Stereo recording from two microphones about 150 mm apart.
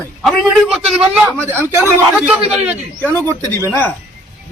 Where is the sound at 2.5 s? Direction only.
10° right (ahead or behind).